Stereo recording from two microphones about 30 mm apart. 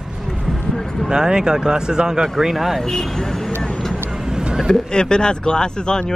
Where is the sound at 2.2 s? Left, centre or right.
Centre.